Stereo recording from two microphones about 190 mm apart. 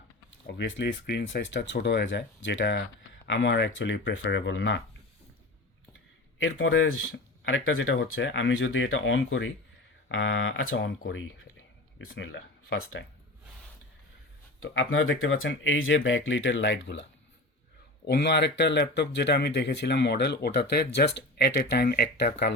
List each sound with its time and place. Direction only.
0.4 s speech: 65° left (ahead or behind)
4.2 s speech: 65° left (ahead or behind)
6.4 s speech: 90° left
14.6 s speech: 90° left; by 22.3 s 55° left (ahead or behind)